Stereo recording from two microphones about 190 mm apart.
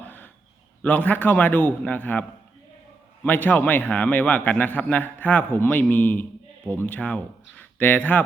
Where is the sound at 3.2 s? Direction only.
10° left (ahead or behind).